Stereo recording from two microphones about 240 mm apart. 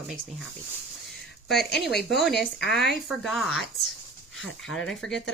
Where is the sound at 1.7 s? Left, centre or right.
Centre.